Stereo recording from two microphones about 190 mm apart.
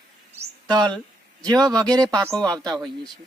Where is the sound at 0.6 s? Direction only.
20° right (ahead or behind).